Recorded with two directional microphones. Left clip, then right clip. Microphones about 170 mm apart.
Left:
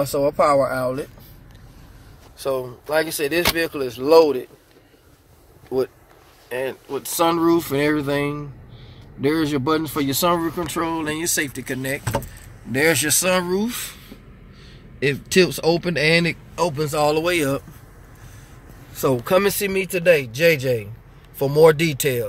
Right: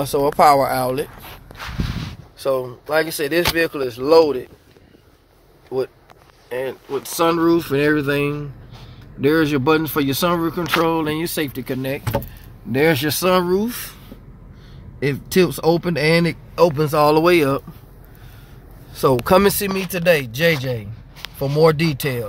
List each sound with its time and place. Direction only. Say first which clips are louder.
0.0 s speech: right 4 dB; 20° right (ahead or behind)
2.3 s speech: right 3 dB; 15° right (ahead or behind); by 4.5 s 5° left (ahead or behind)
5.7 s speech: left 1 dB; 25° left (ahead or behind)
6.5 s speech: right 1 dB; 10° left (ahead or behind)
6.9 s speech: right 2 dB; centre (ahead or behind)
15.0 s speech: even; 10° right (ahead or behind)
16.7 s speech: right 4 dB; 30° right (ahead or behind)
19.2 s speech: right 3 dB; 20° right (ahead or behind)
19.6 s speech: even; 5° left (ahead or behind); by 20.8 s 25° left (ahead or behind)
21.4 s speech: left 2 dB; 10° left (ahead or behind)